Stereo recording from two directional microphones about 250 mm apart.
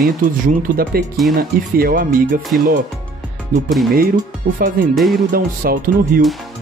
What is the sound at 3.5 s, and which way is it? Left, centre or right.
Speech, right.